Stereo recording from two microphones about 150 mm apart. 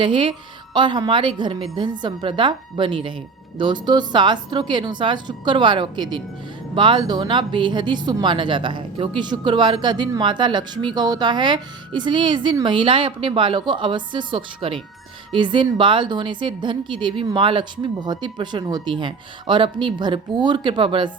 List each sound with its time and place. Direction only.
0.0 s a woman's voice: 35° right (ahead or behind)